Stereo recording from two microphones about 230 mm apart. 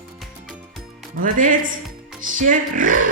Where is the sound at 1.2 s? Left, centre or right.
Right.